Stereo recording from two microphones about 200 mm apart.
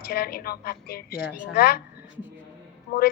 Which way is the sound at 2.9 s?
50° left (ahead or behind).